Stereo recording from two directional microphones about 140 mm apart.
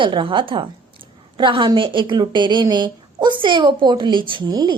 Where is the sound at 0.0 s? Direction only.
35° right (ahead or behind).